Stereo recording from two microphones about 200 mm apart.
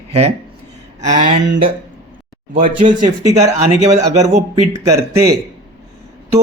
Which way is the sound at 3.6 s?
35° right (ahead or behind).